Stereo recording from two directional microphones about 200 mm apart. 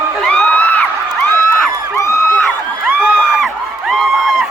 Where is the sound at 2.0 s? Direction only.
15° left (ahead or behind).